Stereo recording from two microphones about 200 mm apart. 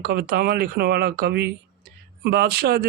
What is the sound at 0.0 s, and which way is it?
Speech, 50° right (ahead or behind).